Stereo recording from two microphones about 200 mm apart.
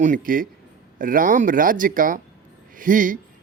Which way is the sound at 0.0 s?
40° right (ahead or behind).